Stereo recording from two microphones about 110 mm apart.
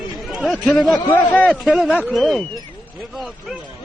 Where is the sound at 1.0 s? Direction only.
15° left (ahead or behind).